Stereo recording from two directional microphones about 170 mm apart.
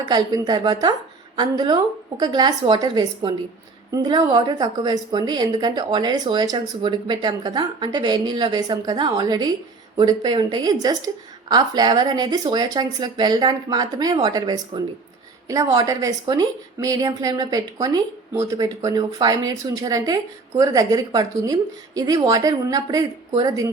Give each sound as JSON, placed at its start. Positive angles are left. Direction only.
{"t": 0.0, "sound": "speech", "side_deg": -25}